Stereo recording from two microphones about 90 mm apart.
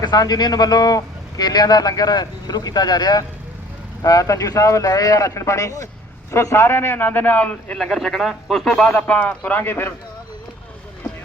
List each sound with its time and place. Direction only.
0.0 s a man's voice: 50° left (ahead or behind); by 9.9 s 20° left (ahead or behind)